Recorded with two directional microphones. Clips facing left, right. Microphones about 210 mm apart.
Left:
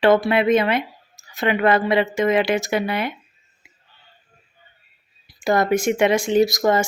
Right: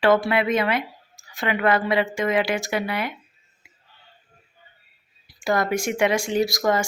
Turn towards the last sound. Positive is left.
turn(degrees=25)  # may be behind; listen again after turning